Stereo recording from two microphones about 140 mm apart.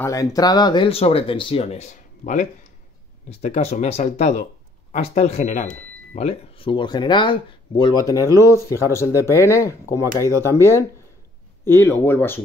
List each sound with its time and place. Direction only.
0.0 s speech: 25° left (ahead or behind)